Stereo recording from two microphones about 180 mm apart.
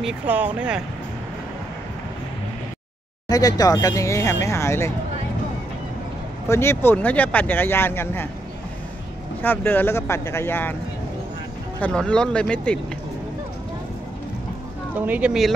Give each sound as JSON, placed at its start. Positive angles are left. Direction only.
{"t": 0.0, "sound": "speech", "side_deg": -5}
{"t": 3.3, "sound": "speech", "side_deg": 20}
{"t": 6.5, "sound": "speech", "side_deg": 15}
{"t": 9.4, "sound": "speech", "side_deg": 10}
{"t": 11.8, "sound": "speech", "side_deg": 5}
{"t": 15.0, "sound": "speech", "side_deg": -10}